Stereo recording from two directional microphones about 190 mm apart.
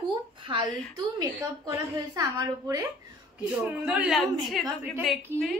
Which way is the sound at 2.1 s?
20° right (ahead or behind).